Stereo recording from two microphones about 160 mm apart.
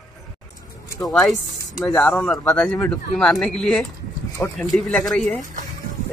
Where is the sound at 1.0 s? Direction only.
Centre (ahead or behind).